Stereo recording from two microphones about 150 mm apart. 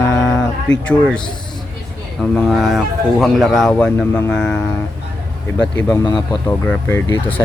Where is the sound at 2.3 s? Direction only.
Centre (ahead or behind).